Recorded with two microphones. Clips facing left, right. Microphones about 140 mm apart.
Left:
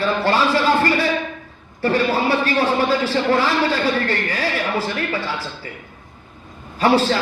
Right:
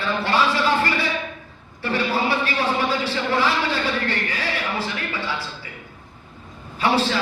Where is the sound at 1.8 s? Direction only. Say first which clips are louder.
Left 6 dB; 40° left (ahead or behind).